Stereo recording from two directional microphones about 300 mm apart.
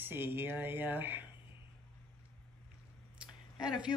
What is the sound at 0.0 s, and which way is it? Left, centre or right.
Speech, centre.